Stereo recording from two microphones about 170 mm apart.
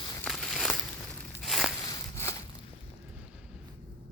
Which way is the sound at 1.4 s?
Centre (ahead or behind).